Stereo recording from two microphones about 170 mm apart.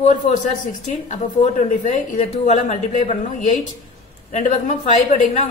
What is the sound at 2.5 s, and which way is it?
A woman's voice, 45° left (ahead or behind).